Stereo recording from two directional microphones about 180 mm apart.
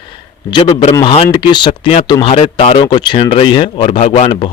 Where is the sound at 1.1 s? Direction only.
25° left (ahead or behind).